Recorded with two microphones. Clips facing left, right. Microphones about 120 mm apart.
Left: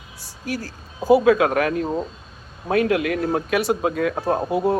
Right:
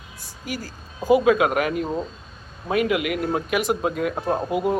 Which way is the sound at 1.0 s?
35° left (ahead or behind).